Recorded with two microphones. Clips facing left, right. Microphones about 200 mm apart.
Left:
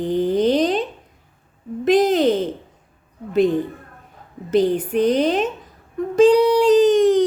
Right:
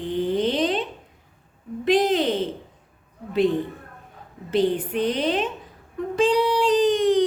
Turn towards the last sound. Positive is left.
turn(degrees=45)  # may be behind; listen again after turning